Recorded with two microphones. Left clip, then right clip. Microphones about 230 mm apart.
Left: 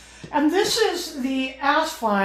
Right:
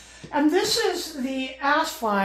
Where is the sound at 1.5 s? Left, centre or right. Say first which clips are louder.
Left 1 dB; right.